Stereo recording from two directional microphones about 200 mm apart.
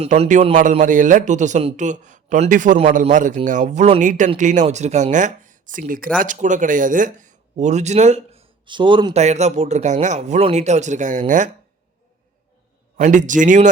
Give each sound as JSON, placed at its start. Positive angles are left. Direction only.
{"t": 0.0, "sound": "speech", "side_deg": -35}
{"t": 13.0, "sound": "speech", "side_deg": -40}